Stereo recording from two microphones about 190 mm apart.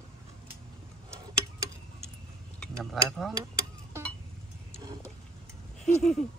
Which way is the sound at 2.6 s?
Centre (ahead or behind).